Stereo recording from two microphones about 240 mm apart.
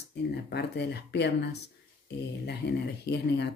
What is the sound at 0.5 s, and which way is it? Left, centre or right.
Speech, left.